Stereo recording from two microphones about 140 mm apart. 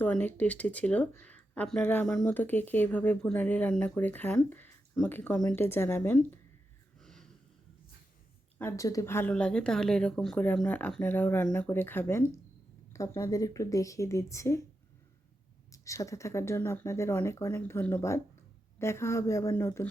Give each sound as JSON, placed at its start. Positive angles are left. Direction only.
{"t": 0.0, "sound": "speech", "side_deg": 15}
{"t": 7.0, "sound": "snort", "side_deg": 5}
{"t": 8.5, "sound": "speech", "side_deg": 20}
{"t": 9.3, "sound": "speech", "side_deg": 5}
{"t": 15.7, "sound": "speech", "side_deg": 25}